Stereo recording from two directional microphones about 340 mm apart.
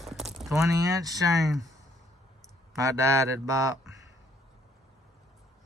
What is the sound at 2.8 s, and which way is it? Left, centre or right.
Speech, centre.